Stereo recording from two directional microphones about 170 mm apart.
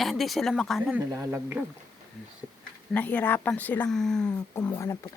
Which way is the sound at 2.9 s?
10° left (ahead or behind).